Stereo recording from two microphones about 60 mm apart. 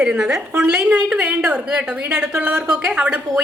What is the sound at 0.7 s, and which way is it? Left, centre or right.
A woman's voice, centre.